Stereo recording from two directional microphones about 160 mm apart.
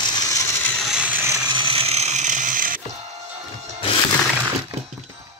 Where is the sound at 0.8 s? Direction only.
5° right (ahead or behind); by 2.8 s 60° right (ahead or behind).